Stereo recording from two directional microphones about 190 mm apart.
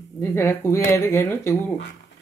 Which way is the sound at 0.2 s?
10° left (ahead or behind).